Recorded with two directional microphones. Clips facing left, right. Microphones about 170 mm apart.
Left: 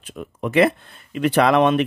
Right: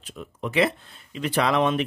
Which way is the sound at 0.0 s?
55° left (ahead or behind).